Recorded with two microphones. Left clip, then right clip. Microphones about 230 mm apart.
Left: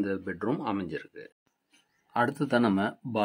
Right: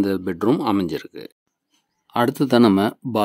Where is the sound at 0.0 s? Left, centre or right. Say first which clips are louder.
Right 10 dB; right.